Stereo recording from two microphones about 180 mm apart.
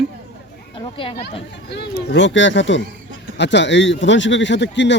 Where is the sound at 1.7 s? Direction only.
65° left (ahead or behind); by 2.8 s 90° left.